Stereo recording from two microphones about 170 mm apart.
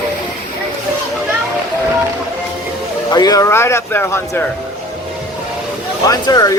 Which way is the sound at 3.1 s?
20° left (ahead or behind).